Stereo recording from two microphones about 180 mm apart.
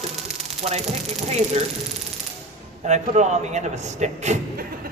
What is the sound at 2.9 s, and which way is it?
Speech, 40° right (ahead or behind).